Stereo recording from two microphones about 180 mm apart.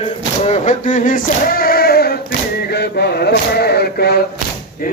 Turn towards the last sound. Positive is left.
turn(degrees=60)  # may be behind; listen again after turning